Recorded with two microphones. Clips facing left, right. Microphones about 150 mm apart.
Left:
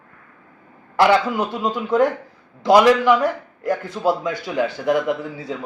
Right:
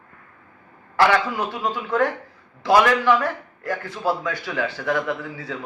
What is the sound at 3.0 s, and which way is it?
A man's voice, 15° left (ahead or behind).